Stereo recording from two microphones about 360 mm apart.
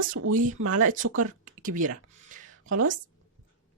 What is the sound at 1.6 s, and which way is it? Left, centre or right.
Speech, right.